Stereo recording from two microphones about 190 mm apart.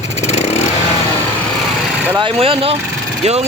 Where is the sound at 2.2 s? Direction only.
30° right (ahead or behind).